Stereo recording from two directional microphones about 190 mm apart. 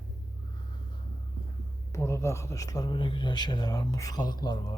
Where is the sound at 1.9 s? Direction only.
15° left (ahead or behind).